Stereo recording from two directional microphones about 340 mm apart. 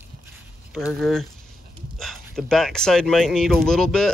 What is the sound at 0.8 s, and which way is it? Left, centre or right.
Speech, centre.